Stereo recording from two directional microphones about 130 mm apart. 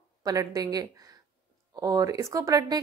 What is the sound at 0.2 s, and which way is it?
A woman's voice, 30° right (ahead or behind).